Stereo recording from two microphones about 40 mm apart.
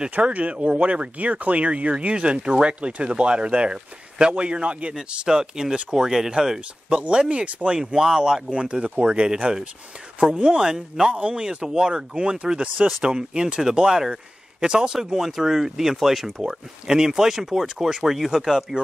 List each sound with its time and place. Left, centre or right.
0.3 s speech: right
5.3 s speech: centre
7.0 s speech: right
7.8 s speech: centre
8.5 s speech: right; by 16.3 s centre
16.4 s speech: centre